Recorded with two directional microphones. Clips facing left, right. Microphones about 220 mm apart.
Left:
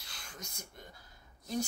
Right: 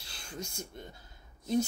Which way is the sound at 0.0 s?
30° right (ahead or behind).